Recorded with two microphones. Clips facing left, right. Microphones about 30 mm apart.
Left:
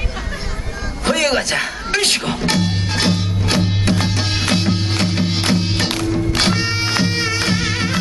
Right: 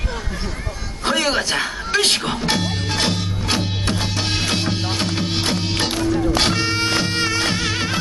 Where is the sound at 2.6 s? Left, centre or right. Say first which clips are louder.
Left 2 dB; centre.